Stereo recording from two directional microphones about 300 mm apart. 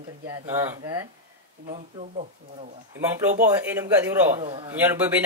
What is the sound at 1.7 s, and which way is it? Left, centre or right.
Speech, right.